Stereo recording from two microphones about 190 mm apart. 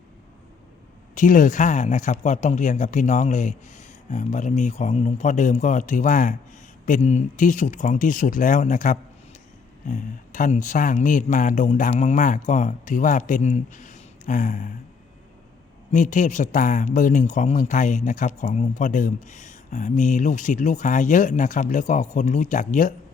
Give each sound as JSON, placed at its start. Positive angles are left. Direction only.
{"t": 1.1, "sound": "speech", "side_deg": 45}
{"t": 15.9, "sound": "speech", "side_deg": 40}